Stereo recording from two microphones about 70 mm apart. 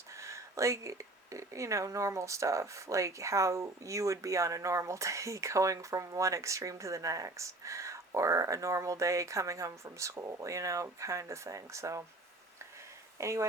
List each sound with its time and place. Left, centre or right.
0.2 s speech: right
13.1 s speech: right